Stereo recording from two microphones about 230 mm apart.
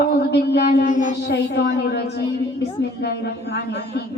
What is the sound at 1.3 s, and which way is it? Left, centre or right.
A man's voice, left.